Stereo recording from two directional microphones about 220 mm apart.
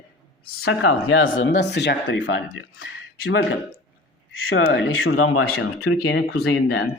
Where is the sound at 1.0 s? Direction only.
65° left (ahead or behind).